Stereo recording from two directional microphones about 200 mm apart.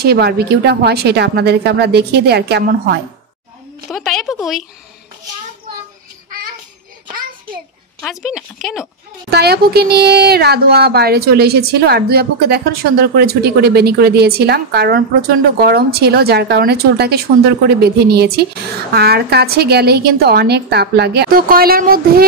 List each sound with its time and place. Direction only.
0.0 s a woman's voice: 55° right (ahead or behind)
3.9 s speech: centre (ahead or behind)
8.0 s speech: centre (ahead or behind)
9.3 s a woman's voice: 55° right (ahead or behind)